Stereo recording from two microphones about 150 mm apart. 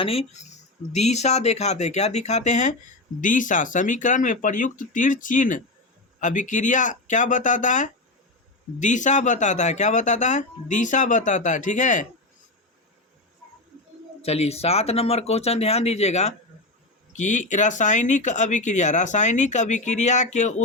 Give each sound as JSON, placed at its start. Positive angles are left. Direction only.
{"t": 0.0, "sound": "speech", "side_deg": 40}
{"t": 14.2, "sound": "speech", "side_deg": 45}